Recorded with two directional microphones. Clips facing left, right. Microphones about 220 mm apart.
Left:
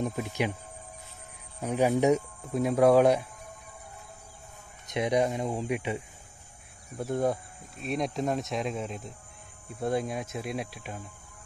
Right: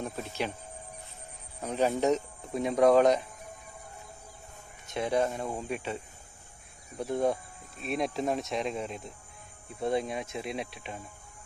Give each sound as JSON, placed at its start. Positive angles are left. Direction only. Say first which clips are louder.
{"t": 0.0, "sound": "speech", "louder": "left 4 dB", "side_deg": 15}
{"t": 1.6, "sound": "speech", "louder": "left 3 dB", "side_deg": 10}
{"t": 4.8, "sound": "speech", "louder": "left 2 dB", "side_deg": 15}
{"t": 7.0, "sound": "speech", "louder": "even", "side_deg": 0}